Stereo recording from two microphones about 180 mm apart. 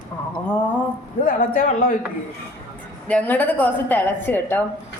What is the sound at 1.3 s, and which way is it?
Speech, 50° left (ahead or behind).